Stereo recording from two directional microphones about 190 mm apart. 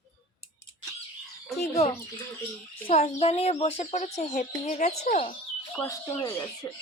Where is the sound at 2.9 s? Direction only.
30° left (ahead or behind).